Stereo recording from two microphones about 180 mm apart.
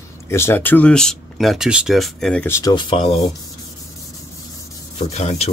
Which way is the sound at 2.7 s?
25° left (ahead or behind).